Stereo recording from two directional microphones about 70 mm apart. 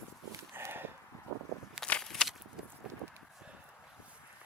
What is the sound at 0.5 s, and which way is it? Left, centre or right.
Walk, right.